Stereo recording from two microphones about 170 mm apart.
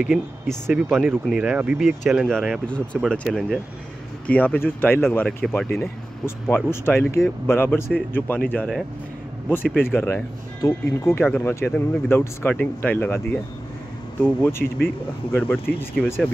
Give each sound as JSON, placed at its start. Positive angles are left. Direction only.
{"t": 0.0, "sound": "speech", "side_deg": 0}